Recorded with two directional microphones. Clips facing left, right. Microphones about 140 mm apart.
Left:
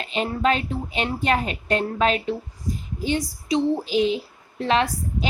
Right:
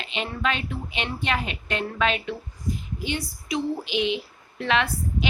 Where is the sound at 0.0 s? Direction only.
40° left (ahead or behind).